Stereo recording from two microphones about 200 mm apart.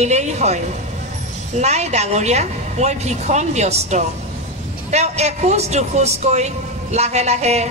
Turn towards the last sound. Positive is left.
turn(degrees=-35)  # may be behind; listen again after turning